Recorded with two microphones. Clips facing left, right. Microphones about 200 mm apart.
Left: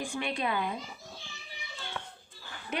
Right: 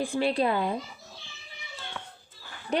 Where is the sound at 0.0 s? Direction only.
35° right (ahead or behind).